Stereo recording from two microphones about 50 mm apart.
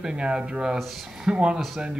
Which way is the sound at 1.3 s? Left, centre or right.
Centre.